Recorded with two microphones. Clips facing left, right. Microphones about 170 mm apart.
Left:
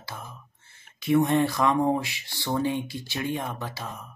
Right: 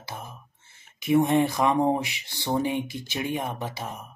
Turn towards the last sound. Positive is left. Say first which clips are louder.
# right 2 dB
turn(degrees=-20)  # may be behind; listen again after turning